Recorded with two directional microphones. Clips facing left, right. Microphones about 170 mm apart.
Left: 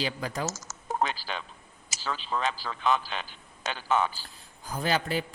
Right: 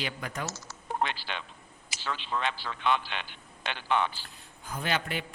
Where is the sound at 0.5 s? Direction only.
45° left (ahead or behind).